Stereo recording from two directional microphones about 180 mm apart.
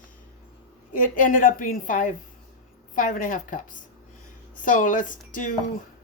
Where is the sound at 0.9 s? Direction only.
50° left (ahead or behind).